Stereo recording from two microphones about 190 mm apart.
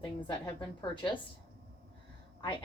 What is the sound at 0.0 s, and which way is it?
A woman's voice, 20° left (ahead or behind).